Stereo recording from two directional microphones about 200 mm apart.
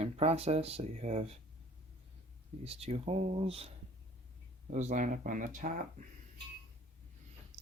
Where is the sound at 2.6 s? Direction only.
30° right (ahead or behind).